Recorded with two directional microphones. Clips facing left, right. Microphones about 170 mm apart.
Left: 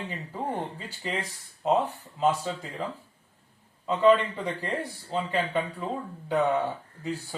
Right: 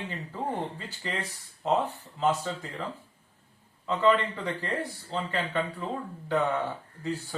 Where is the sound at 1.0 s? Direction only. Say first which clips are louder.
Left 2 dB; 15° left (ahead or behind).